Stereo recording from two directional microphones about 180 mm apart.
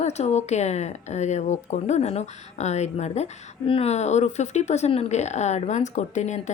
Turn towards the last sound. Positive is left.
turn(degrees=40)  # may be behind; listen again after turning